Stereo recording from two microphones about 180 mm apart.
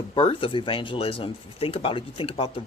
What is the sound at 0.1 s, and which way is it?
Speech, 30° left (ahead or behind).